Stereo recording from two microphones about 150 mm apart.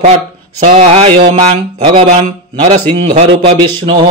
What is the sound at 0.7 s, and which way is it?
Speech, 40° right (ahead or behind).